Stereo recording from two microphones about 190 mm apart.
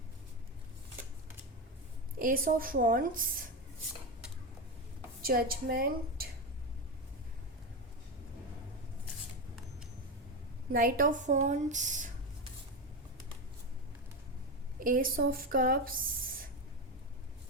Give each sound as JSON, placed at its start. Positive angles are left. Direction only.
{"t": 2.1, "sound": "a woman's voice", "side_deg": -45}
{"t": 5.2, "sound": "a woman's voice", "side_deg": -50}
{"t": 10.7, "sound": "a woman's voice", "side_deg": -50}
{"t": 14.8, "sound": "a woman's voice", "side_deg": -45}